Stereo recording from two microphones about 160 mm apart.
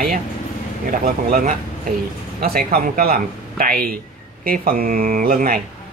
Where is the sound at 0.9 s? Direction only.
60° right (ahead or behind).